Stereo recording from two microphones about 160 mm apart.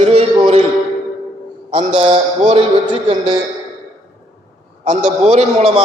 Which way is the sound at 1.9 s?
40° right (ahead or behind).